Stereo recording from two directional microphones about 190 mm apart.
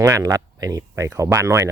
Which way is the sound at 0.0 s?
20° right (ahead or behind).